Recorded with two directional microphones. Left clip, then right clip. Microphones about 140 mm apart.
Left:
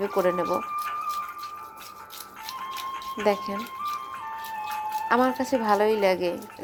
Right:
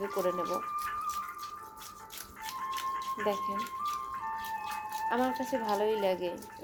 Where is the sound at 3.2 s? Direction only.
30° left (ahead or behind).